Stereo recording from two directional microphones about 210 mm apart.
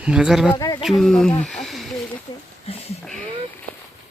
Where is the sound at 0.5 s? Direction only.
20° left (ahead or behind).